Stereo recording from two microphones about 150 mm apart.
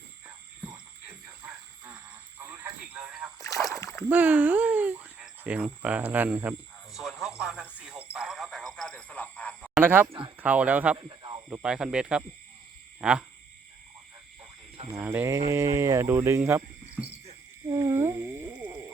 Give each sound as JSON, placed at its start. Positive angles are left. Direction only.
{"t": 1.5, "sound": "a sound", "side_deg": -15}
{"t": 2.4, "sound": "radio", "side_deg": -15}
{"t": 3.4, "sound": "rowboat", "side_deg": 20}
{"t": 3.8, "sound": "splash", "side_deg": 20}
{"t": 4.1, "sound": "speech", "side_deg": -10}
{"t": 6.9, "sound": "radio", "side_deg": 0}
{"t": 9.8, "sound": "speech", "side_deg": -15}
{"t": 10.9, "sound": "snake", "side_deg": -30}
{"t": 11.4, "sound": "speech", "side_deg": -10}
{"t": 14.8, "sound": "speech", "side_deg": -15}
{"t": 17.7, "sound": "a sound", "side_deg": -20}